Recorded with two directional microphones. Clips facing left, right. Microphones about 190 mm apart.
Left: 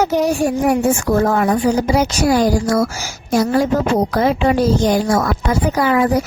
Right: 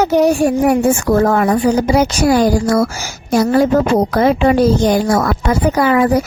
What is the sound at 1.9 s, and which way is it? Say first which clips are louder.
A woman's voice: right 3 dB; 60° right (ahead or behind).